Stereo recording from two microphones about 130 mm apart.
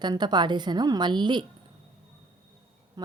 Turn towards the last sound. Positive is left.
turn(degrees=-30)  # may be behind; listen again after turning